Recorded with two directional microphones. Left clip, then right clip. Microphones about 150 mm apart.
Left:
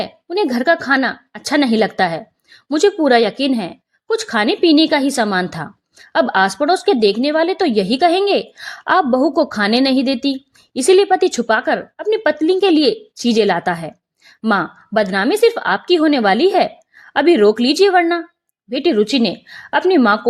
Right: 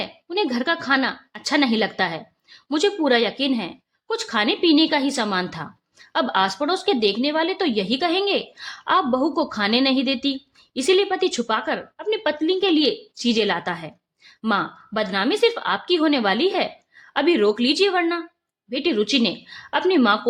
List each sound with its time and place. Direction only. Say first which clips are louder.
0.0 s speech: left 5 dB; 40° left (ahead or behind)